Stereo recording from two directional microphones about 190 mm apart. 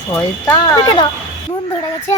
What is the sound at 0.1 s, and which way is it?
Speech, 15° left (ahead or behind).